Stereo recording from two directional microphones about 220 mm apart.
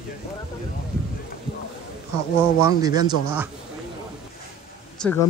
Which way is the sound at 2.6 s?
15° right (ahead or behind).